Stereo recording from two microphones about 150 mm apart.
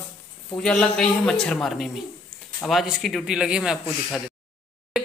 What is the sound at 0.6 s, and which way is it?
Speech, 5° left (ahead or behind).